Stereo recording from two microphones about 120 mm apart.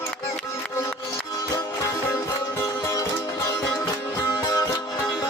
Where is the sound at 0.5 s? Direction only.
20° left (ahead or behind).